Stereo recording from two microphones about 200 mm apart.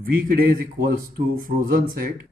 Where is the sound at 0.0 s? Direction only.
45° right (ahead or behind).